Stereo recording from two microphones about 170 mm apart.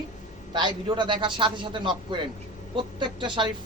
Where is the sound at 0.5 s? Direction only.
25° right (ahead or behind).